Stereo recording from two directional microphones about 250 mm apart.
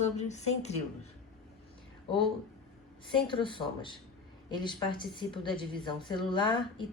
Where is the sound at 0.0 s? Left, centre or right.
Left.